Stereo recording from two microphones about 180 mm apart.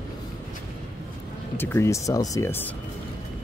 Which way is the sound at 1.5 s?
15° left (ahead or behind).